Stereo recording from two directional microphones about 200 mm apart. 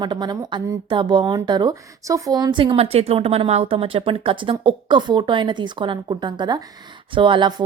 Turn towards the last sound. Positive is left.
turn(degrees=-25)  # may be behind; listen again after turning